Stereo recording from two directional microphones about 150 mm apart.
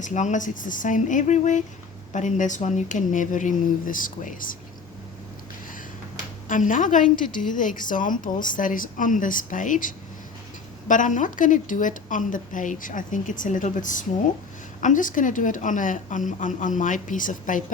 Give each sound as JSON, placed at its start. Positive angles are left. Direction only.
{"t": 0.0, "sound": "speech", "side_deg": 55}
{"t": 6.5, "sound": "speech", "side_deg": 60}